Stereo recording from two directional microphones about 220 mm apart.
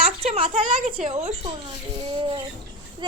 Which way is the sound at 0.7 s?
35° right (ahead or behind).